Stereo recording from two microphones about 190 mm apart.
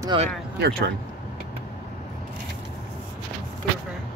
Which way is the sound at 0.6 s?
55° right (ahead or behind).